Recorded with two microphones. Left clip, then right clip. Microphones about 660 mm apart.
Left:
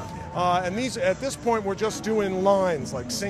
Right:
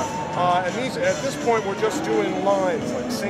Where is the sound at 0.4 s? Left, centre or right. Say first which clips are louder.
Right 2 dB; left.